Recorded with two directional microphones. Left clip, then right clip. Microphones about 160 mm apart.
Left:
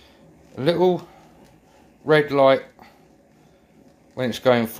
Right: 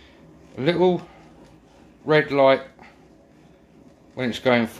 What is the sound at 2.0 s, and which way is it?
Speech, 35° left (ahead or behind).